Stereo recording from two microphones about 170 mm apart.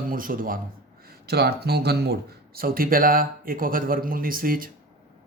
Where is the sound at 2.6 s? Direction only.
55° right (ahead or behind).